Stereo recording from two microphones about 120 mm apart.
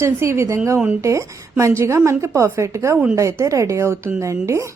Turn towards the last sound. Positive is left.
turn(degrees=-25)  # may be behind; listen again after turning